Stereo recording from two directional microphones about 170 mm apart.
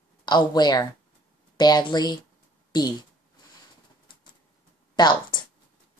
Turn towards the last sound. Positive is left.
turn(degrees=25)  # may be behind; listen again after turning